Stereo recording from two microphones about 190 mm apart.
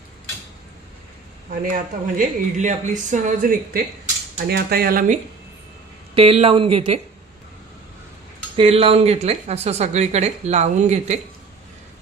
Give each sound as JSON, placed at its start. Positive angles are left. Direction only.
{"t": 1.5, "sound": "speech", "side_deg": -45}
{"t": 6.1, "sound": "speech", "side_deg": -30}
{"t": 8.5, "sound": "speech", "side_deg": -30}